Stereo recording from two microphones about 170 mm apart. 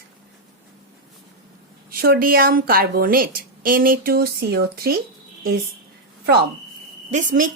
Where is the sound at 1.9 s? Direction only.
60° right (ahead or behind).